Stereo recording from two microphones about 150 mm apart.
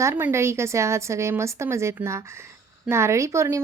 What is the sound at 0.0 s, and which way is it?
Speech, 15° right (ahead or behind).